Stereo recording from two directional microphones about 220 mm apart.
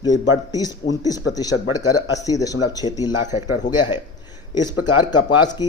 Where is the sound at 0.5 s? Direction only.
15° left (ahead or behind).